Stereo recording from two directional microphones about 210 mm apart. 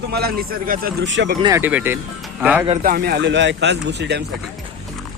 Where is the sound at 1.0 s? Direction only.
60° right (ahead or behind).